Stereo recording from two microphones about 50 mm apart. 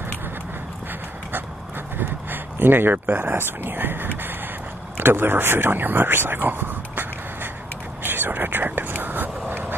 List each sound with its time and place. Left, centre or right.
2.0 s speech: right
8.0 s whispering: right